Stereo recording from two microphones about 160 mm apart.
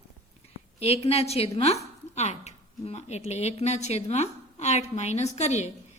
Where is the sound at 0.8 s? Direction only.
40° left (ahead or behind).